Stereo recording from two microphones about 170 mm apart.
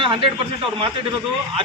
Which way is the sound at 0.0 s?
30° right (ahead or behind).